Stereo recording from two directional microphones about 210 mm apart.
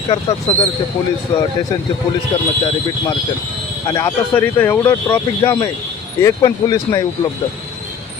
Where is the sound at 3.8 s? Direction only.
15° left (ahead or behind).